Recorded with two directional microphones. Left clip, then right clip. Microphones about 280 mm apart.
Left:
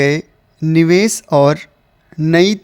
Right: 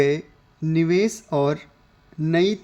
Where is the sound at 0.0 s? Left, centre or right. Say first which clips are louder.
Left 5 dB; left.